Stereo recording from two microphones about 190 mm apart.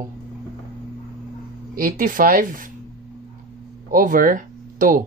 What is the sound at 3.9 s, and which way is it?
Speech, 45° right (ahead or behind).